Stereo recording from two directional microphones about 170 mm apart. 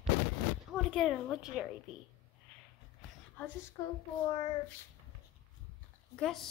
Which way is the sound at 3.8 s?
25° left (ahead or behind).